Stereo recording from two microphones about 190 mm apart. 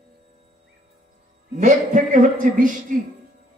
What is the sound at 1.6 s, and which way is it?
A woman's voice, 40° right (ahead or behind).